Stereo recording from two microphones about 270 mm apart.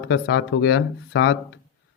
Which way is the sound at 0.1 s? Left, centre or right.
Left.